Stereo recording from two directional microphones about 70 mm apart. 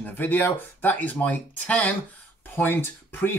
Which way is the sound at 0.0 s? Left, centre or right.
Left.